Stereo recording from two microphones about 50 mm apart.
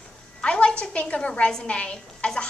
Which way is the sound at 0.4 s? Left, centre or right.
Left.